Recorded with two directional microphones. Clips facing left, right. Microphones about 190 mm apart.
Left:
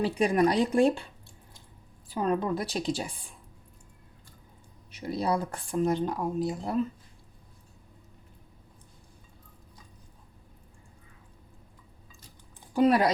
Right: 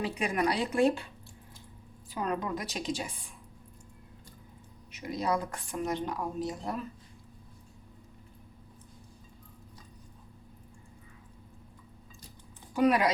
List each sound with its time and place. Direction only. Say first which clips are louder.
0.0 s speech: left 6 dB; 30° left (ahead or behind)
2.0 s speech: left 5 dB; 30° left (ahead or behind)
4.9 s speech: left 2 dB; 30° left (ahead or behind)
12.7 s speech: left 3 dB; 35° left (ahead or behind)